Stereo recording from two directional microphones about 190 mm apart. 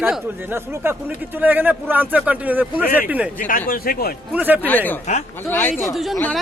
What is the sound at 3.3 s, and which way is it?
Speech, 45° left (ahead or behind).